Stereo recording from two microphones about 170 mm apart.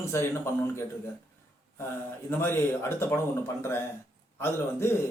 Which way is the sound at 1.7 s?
15° left (ahead or behind).